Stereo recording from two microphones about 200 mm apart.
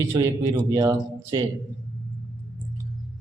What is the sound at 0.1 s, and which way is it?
Speech, 15° right (ahead or behind).